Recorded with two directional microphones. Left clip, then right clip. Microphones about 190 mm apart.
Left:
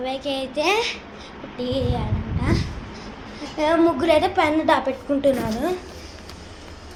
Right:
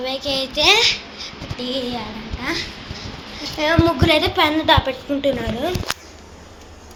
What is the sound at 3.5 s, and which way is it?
Speech, 15° left (ahead or behind).